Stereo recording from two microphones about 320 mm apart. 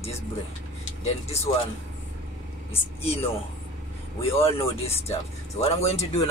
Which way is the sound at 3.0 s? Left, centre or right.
Centre.